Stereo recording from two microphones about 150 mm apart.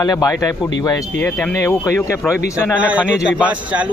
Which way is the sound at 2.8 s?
10° right (ahead or behind).